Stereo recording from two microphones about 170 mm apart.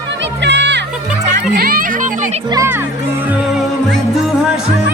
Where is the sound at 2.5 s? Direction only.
15° right (ahead or behind).